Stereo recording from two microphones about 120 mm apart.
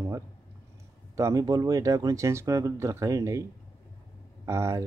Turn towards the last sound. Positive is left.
turn(degrees=-25)  # may be behind; listen again after turning